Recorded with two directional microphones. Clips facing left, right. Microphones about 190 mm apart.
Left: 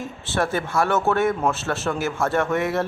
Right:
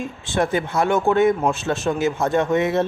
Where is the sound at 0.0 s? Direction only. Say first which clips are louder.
Right 3 dB; 15° right (ahead or behind).